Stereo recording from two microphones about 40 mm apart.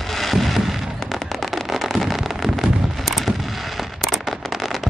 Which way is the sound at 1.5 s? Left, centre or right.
Centre.